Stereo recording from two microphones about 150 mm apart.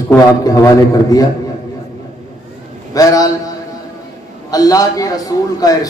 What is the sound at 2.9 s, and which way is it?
Speech, 25° left (ahead or behind).